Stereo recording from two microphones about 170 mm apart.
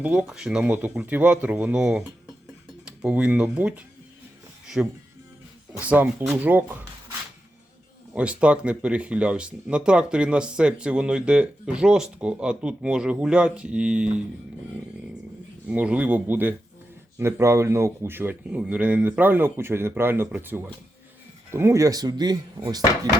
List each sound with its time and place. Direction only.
0.0 s speech: 5° right (ahead or behind)
4.6 s music: 5° right (ahead or behind)
5.8 s speech: 10° right (ahead or behind)
8.1 s speech: 5° right (ahead or behind)
15.6 s speech: 10° right (ahead or behind)